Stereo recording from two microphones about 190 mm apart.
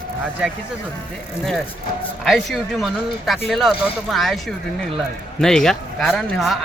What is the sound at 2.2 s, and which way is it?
Speech, centre (ahead or behind).